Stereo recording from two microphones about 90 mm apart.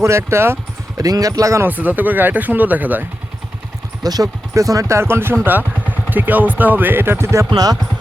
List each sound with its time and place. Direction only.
0.0 s speech: 30° right (ahead or behind)
0.9 s speech: 40° right (ahead or behind)
1.6 s speech: 20° right (ahead or behind)
4.0 s speech: 45° right (ahead or behind)
7.5 s speech: 45° right (ahead or behind)